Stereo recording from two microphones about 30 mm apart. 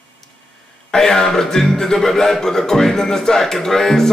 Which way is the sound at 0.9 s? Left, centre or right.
Centre.